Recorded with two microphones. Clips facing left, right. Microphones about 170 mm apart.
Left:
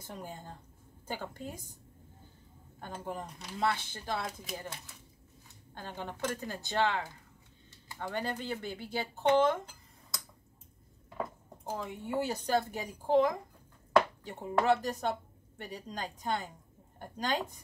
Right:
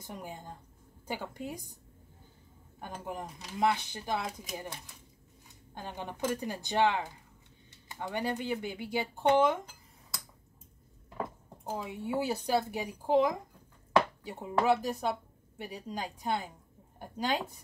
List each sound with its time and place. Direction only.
0.0 s speech: 15° right (ahead or behind)
2.8 s speech: 10° right (ahead or behind)
5.8 s speech: 15° right (ahead or behind)
11.7 s a woman's voice: 5° right (ahead or behind)